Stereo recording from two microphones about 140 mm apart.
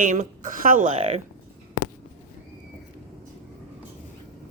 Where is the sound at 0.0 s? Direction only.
65° right (ahead or behind); by 1.2 s 45° right (ahead or behind).